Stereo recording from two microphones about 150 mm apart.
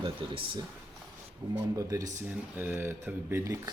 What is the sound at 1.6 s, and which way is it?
Speech, 20° right (ahead or behind).